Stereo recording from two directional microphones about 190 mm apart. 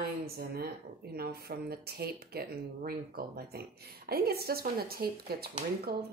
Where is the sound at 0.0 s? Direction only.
55° right (ahead or behind).